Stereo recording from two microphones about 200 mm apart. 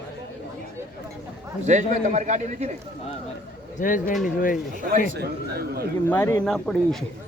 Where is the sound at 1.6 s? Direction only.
35° right (ahead or behind).